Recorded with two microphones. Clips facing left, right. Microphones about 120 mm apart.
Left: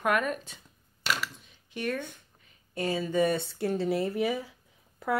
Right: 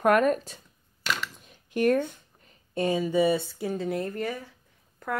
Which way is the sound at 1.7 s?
45° right (ahead or behind).